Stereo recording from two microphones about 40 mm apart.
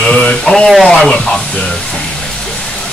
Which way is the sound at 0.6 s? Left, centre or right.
Centre.